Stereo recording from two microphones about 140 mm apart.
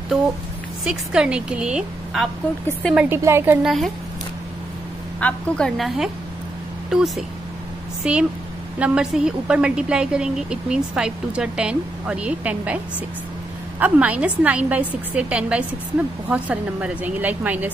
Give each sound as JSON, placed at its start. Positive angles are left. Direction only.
{"t": 0.8, "sound": "a woman's voice", "side_deg": -5}
{"t": 3.2, "sound": "a woman's voice", "side_deg": -20}
{"t": 3.6, "sound": "a woman's voice", "side_deg": 0}
{"t": 5.2, "sound": "a woman's voice", "side_deg": 5}